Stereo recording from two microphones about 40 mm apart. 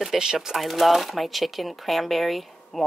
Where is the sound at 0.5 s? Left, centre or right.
Centre.